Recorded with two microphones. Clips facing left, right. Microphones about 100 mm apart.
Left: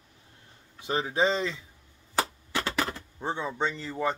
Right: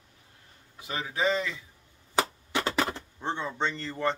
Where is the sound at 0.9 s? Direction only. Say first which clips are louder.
Left 3 dB; 30° left (ahead or behind).